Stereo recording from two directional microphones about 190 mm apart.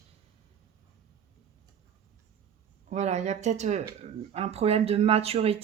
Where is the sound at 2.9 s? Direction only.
35° right (ahead or behind).